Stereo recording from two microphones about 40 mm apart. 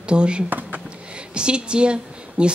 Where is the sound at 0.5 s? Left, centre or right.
Right.